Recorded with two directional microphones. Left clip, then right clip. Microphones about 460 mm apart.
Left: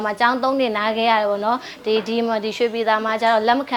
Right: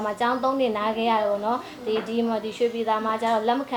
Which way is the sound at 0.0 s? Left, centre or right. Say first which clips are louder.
Left 5 dB; left.